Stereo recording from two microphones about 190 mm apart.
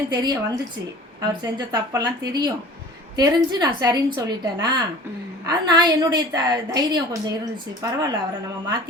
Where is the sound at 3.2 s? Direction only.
20° right (ahead or behind).